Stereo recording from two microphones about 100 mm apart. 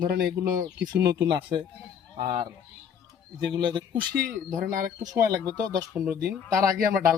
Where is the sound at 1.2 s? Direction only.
55° right (ahead or behind).